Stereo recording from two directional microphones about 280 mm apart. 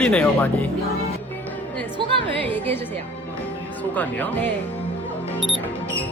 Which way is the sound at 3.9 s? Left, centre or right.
Centre.